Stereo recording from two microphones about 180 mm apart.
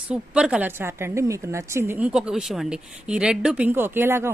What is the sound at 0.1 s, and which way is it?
A woman's voice, 5° right (ahead or behind).